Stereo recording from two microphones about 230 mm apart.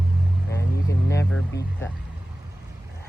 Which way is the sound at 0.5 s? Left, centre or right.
Centre.